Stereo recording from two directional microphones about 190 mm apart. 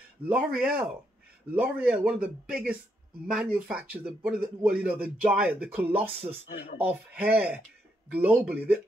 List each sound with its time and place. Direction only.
0.3 s a man's voice: 5° right (ahead or behind)
6.5 s speech: 45° left (ahead or behind)
6.8 s a man's voice: 10° right (ahead or behind)